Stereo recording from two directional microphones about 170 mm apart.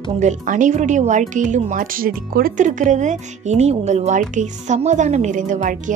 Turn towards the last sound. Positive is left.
turn(degrees=-50)  # may be behind; listen again after turning